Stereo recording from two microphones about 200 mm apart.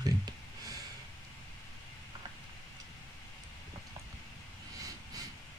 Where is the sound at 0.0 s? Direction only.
20° right (ahead or behind).